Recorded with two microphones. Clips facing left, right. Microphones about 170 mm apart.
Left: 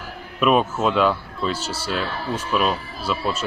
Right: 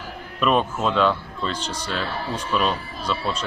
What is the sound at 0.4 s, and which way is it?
Speech, 5° left (ahead or behind).